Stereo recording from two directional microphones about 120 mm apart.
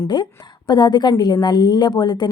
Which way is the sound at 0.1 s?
40° left (ahead or behind).